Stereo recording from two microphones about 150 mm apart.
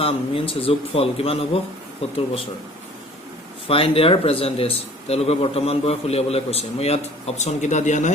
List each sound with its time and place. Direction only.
0.0 s a man's voice: 40° left (ahead or behind)
3.7 s speech: 40° left (ahead or behind)